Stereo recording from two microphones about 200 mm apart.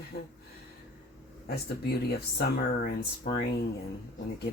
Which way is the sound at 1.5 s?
50° left (ahead or behind).